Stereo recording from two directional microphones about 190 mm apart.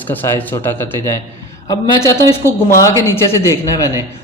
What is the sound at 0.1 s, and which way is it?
Speech, 10° left (ahead or behind).